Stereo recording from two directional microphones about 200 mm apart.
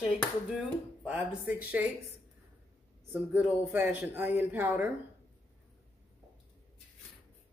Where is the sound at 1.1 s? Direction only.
5° right (ahead or behind).